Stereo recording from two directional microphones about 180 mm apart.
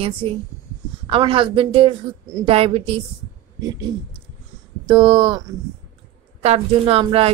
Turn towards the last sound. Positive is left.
turn(degrees=-30)  # may be behind; listen again after turning